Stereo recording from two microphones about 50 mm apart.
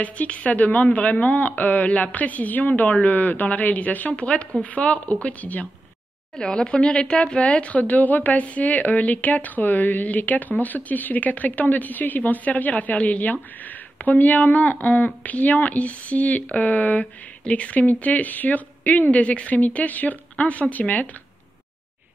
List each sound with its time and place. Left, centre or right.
0.0 s speech: left
6.4 s speech: centre